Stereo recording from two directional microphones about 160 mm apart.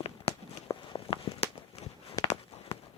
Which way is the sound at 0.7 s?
30° left (ahead or behind).